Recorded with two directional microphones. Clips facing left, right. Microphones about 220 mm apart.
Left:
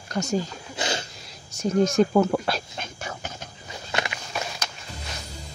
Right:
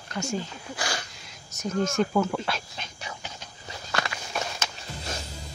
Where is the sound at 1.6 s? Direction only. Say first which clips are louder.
Left 6 dB; 35° left (ahead or behind); by 3.3 s 50° left (ahead or behind).